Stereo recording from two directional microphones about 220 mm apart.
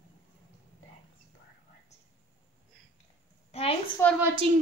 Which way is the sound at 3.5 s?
25° left (ahead or behind).